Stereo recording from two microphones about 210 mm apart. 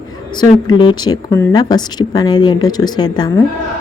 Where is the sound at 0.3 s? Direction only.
20° left (ahead or behind).